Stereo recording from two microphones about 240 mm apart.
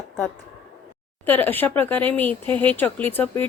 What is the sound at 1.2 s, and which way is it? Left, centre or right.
A woman's voice, centre.